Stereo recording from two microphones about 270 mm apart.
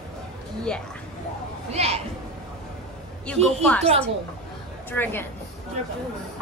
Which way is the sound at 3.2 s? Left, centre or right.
Centre.